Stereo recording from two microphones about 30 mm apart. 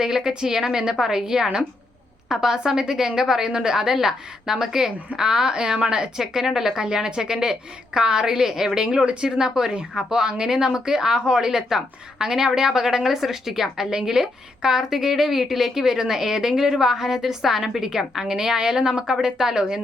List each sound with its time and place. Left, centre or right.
0.0 s a woman's voice: right
6.1 s a woman's voice: centre
13.9 s a woman's voice: right